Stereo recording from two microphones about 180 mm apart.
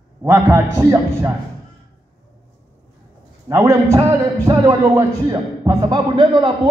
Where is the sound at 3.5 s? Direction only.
20° right (ahead or behind).